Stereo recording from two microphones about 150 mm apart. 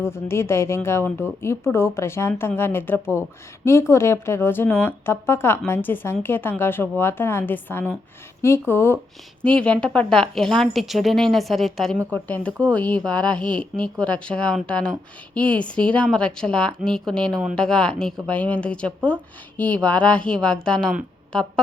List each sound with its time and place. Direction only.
0.0 s a woman's voice: 15° left (ahead or behind)